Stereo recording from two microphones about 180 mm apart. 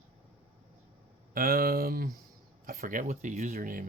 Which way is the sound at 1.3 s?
55° right (ahead or behind).